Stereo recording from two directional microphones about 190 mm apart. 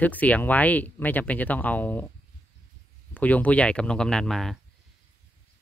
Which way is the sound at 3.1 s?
10° left (ahead or behind).